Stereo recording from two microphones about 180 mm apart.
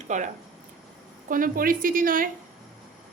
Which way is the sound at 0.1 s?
40° right (ahead or behind).